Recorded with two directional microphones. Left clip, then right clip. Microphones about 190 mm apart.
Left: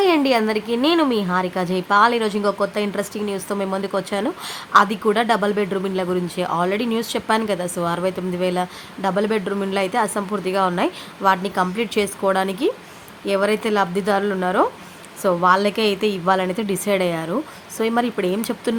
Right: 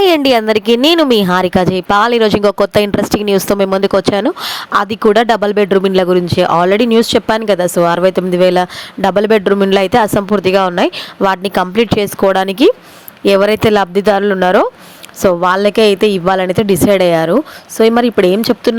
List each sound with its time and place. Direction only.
0.0 s a woman's voice: 60° right (ahead or behind); by 18.8 s 40° right (ahead or behind)